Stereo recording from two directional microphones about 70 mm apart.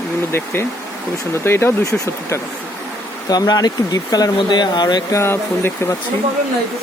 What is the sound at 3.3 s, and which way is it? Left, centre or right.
Speech, left.